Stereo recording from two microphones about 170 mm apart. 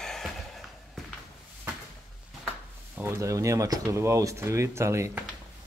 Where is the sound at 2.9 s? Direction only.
15° right (ahead or behind).